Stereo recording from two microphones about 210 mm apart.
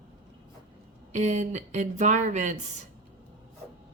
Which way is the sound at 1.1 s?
35° right (ahead or behind).